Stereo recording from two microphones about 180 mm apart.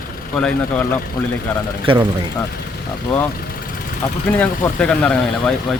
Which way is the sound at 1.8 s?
30° right (ahead or behind).